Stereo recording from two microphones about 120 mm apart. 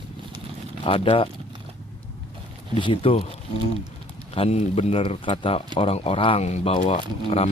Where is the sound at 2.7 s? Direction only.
45° left (ahead or behind).